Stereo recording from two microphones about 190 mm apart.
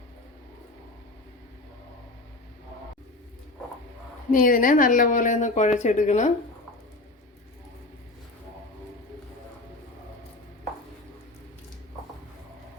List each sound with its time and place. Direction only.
4.3 s speech: 45° left (ahead or behind)